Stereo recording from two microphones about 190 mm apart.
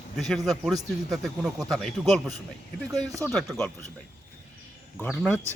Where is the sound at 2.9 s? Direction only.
20° right (ahead or behind).